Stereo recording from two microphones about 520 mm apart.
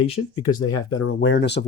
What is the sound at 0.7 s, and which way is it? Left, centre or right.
Speech, left.